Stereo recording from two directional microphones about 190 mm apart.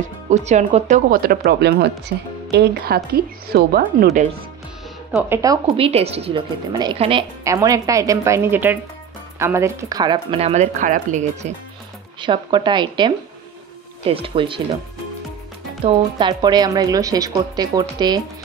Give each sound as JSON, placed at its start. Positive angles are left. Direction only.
{"t": 0.3, "sound": "a woman's voice", "side_deg": -40}
{"t": 5.3, "sound": "a woman's voice", "side_deg": -20}
{"t": 5.8, "sound": "a woman's voice", "side_deg": -30}
{"t": 12.2, "sound": "speech", "side_deg": -25}
{"t": 15.8, "sound": "speech", "side_deg": -25}